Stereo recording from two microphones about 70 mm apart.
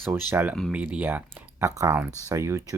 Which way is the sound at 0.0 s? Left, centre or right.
Right.